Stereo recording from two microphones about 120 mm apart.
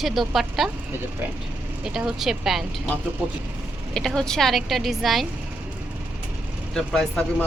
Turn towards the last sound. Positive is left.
turn(degrees=5)  # may be behind; listen again after turning